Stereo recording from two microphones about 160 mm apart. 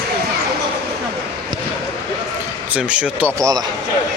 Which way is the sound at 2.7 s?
10° right (ahead or behind).